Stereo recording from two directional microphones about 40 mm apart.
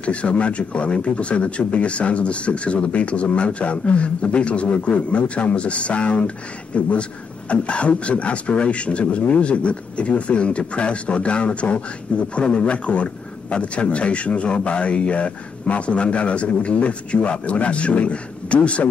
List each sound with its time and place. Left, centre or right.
0.0 s speech: left